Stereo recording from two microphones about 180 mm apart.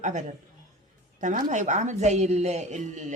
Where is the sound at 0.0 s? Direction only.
40° right (ahead or behind).